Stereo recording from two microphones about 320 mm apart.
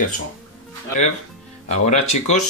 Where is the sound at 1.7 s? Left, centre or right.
Left.